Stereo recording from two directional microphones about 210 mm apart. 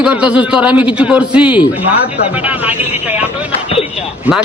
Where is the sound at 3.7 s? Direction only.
25° left (ahead or behind).